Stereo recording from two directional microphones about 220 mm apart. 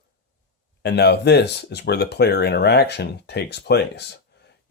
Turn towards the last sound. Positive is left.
turn(degrees=50)  # may be behind; listen again after turning